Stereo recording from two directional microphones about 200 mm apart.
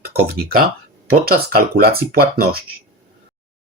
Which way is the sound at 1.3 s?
50° right (ahead or behind).